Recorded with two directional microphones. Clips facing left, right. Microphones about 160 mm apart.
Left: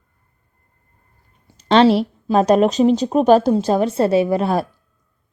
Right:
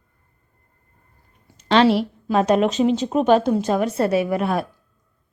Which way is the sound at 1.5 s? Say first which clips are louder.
Left 3 dB; 35° left (ahead or behind).